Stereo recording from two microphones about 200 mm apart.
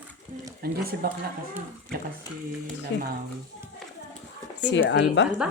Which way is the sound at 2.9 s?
65° left (ahead or behind).